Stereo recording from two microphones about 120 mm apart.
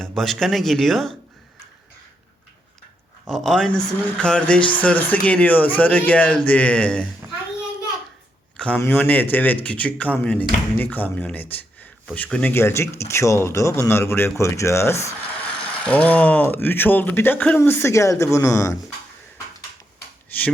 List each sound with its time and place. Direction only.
0.2 s speech: centre (ahead or behind)
3.2 s speech: 5° left (ahead or behind)
8.5 s a sound: 10° left (ahead or behind)
8.8 s speech: 15° left (ahead or behind)
15.8 s speech: 10° left (ahead or behind)